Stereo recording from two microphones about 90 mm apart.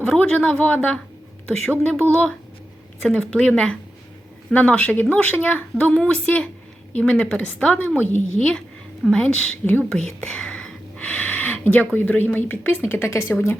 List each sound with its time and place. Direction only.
0.0 s speech: 15° left (ahead or behind)
10.0 s whispering: 5° left (ahead or behind)
11.9 s speech: 20° left (ahead or behind)